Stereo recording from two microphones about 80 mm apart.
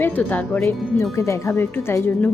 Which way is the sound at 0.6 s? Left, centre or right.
Left.